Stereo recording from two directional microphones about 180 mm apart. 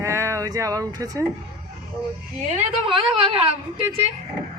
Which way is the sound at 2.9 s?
30° right (ahead or behind).